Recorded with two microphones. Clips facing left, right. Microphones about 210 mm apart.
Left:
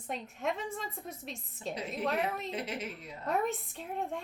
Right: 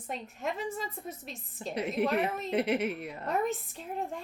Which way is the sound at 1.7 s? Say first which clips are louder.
Right 5 dB; 60° right (ahead or behind).